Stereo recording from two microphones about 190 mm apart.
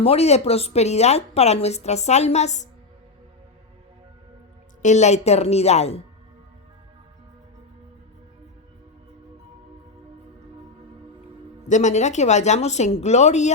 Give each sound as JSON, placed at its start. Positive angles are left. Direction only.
{"t": 0.0, "sound": "a woman's voice", "side_deg": 30}
{"t": 4.8, "sound": "a woman's voice", "side_deg": 40}
{"t": 11.7, "sound": "a woman's voice", "side_deg": 40}